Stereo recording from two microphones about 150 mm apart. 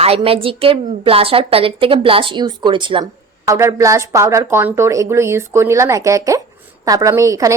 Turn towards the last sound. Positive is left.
turn(degrees=-20)  # may be behind; listen again after turning